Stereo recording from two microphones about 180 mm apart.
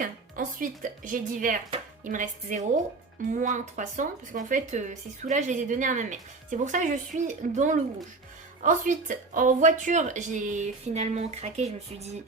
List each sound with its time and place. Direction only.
0.0 s speech: 45° right (ahead or behind)